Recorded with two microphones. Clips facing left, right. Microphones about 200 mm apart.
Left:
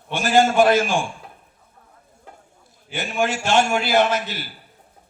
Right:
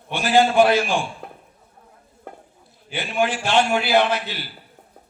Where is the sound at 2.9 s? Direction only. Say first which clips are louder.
Even; 45° left (ahead or behind).